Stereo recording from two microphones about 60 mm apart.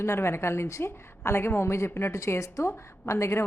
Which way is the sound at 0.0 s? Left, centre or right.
Left.